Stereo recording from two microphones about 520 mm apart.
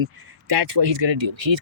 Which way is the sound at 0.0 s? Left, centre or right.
Right.